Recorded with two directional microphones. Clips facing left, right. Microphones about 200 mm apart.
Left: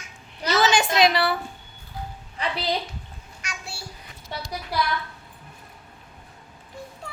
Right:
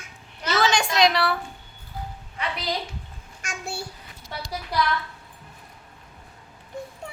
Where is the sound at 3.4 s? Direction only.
50° right (ahead or behind).